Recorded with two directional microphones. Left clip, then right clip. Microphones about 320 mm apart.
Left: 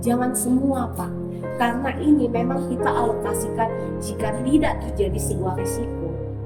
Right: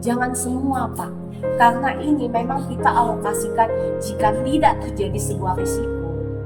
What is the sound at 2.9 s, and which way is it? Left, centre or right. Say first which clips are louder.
Speech: right 5 dB; centre.